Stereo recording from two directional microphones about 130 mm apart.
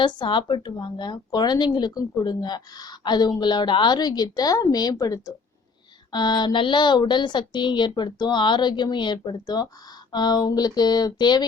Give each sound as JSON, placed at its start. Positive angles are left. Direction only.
{"t": 0.0, "sound": "a woman's voice", "side_deg": 35}